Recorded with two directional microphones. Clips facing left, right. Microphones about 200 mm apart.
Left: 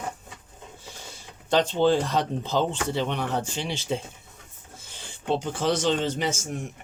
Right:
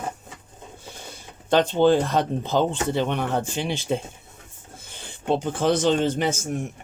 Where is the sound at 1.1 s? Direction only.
55° right (ahead or behind).